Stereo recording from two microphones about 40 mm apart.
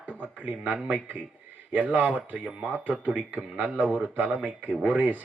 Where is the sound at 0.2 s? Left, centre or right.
Right.